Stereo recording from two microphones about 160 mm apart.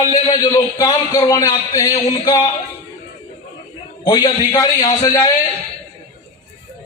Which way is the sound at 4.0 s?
25° left (ahead or behind).